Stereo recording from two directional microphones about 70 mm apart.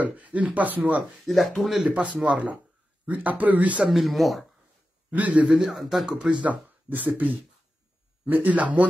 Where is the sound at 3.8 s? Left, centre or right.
Centre.